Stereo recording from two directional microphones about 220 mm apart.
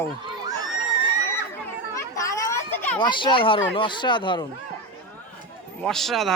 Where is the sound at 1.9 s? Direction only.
15° left (ahead or behind).